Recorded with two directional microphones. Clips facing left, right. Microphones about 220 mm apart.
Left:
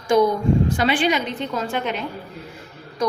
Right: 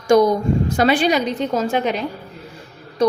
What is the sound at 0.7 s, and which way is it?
A woman's voice, 40° right (ahead or behind).